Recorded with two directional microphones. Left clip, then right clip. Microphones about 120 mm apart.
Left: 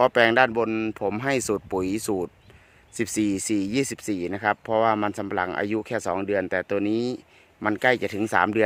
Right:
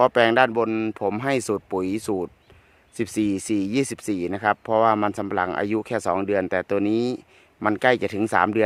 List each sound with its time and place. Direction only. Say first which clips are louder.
0.0 s speech: right 1 dB; 30° right (ahead or behind)